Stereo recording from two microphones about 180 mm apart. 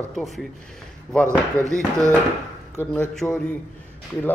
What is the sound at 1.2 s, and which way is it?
Speech, 15° right (ahead or behind).